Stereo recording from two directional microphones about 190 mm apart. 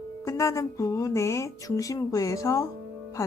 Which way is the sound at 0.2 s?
15° left (ahead or behind).